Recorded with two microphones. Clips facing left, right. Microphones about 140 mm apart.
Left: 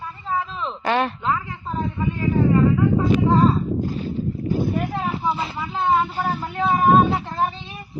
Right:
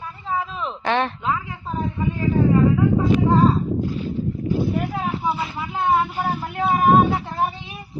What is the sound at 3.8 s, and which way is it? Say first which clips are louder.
Boat: even; 40° left (ahead or behind).